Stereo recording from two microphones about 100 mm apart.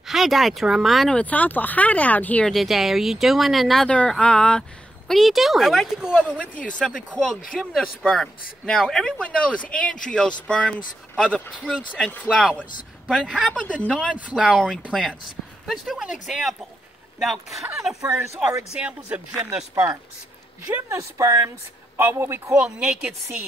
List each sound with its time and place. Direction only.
0.0 s speech: centre (ahead or behind)
1.1 s speech: 15° left (ahead or behind)
2.5 s speech: centre (ahead or behind)
6.3 s speech: 10° left (ahead or behind)
14.1 s speech: 10° right (ahead or behind)
18.0 s speech: 30° right (ahead or behind)
19.0 s speech: 15° right (ahead or behind)
19.7 s speech: 35° right (ahead or behind)
22.6 s speech: 10° right (ahead or behind)